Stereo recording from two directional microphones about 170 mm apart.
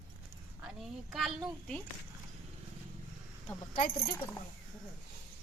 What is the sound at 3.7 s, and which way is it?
Speech, 60° left (ahead or behind).